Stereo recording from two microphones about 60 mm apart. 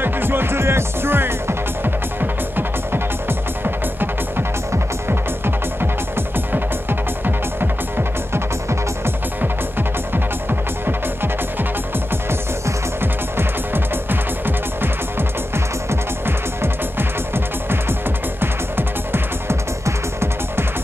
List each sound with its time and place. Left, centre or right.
0.0 s music: right
8.3 s music: right
12.1 s music: right
18.4 s music: right